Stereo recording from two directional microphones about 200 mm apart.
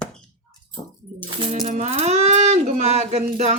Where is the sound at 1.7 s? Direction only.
35° right (ahead or behind).